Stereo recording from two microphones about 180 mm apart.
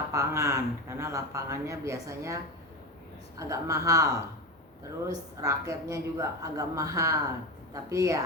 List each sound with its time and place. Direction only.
0.1 s speech: 15° right (ahead or behind)